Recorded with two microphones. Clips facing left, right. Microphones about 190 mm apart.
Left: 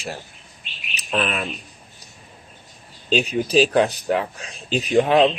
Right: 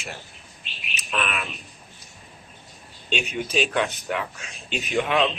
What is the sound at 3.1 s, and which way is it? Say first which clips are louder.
Speech: left 8 dB; 35° left (ahead or behind).